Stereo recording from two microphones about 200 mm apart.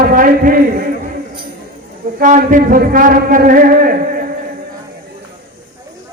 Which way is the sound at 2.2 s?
40° right (ahead or behind).